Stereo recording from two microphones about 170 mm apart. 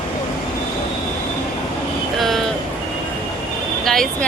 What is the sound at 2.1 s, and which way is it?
Vehicle, centre (ahead or behind).